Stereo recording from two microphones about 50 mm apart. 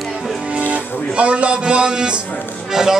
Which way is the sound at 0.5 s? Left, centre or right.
Right.